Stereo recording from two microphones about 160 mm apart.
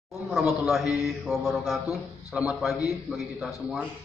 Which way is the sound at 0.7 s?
Centre (ahead or behind).